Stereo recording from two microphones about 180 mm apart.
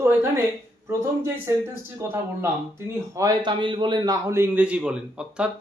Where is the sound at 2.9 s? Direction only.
20° right (ahead or behind).